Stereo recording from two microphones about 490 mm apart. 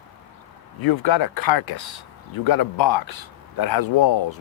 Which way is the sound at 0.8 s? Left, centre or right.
Left.